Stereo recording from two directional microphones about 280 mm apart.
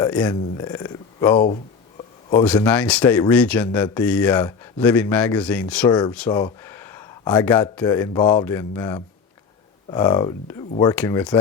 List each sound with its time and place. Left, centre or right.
0.0 s speech: centre
5.9 s speech: centre